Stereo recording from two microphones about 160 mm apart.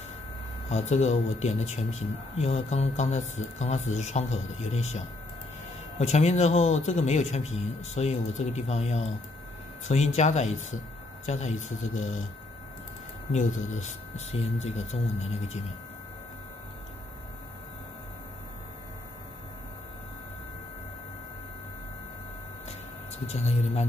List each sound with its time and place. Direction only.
0.7 s speech: 45° left (ahead or behind)
13.3 s speech: 50° left (ahead or behind)
22.7 s a sound: 40° left (ahead or behind)